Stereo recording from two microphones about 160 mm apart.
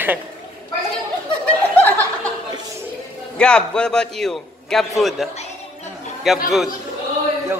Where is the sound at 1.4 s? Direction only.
10° left (ahead or behind).